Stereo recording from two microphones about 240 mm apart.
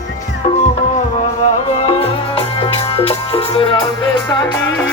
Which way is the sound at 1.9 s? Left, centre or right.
Left.